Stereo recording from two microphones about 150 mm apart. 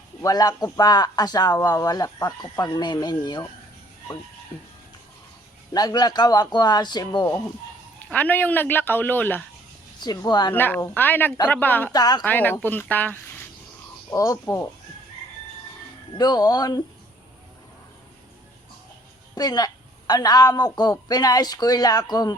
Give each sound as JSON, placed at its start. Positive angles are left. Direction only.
{"t": 0.2, "sound": "speech", "side_deg": 25}
{"t": 4.5, "sound": "music", "side_deg": 35}
{"t": 5.7, "sound": "speech", "side_deg": 25}
{"t": 8.1, "sound": "speech", "side_deg": 10}
{"t": 10.0, "sound": "speech", "side_deg": 30}
{"t": 10.5, "sound": "speech", "side_deg": 15}
{"t": 11.9, "sound": "speech", "side_deg": 25}
{"t": 12.2, "sound": "speech", "side_deg": 10}
{"t": 14.1, "sound": "speech", "side_deg": 20}
{"t": 16.1, "sound": "speech", "side_deg": 25}
{"t": 19.4, "sound": "speech", "side_deg": 25}